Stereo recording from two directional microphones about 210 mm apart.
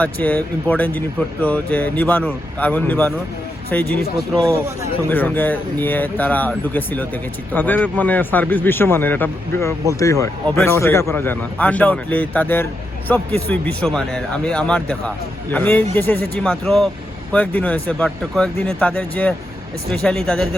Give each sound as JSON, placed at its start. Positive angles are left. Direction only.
{"t": 0.0, "sound": "speech", "side_deg": 10}
{"t": 4.4, "sound": "speech", "side_deg": -15}
{"t": 5.0, "sound": "speech", "side_deg": 10}